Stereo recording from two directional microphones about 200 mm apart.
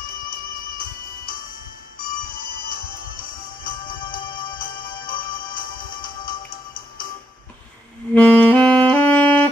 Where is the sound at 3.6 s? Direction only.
45° left (ahead or behind).